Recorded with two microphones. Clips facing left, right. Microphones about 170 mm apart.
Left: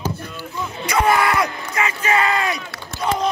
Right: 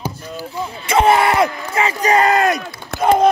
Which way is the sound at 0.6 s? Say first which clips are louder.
Right 4 dB; 30° right (ahead or behind).